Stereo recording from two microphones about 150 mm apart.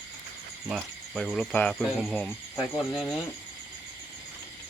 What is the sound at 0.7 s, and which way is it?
Speech, centre (ahead or behind).